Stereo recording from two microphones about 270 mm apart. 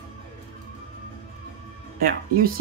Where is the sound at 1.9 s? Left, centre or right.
Right.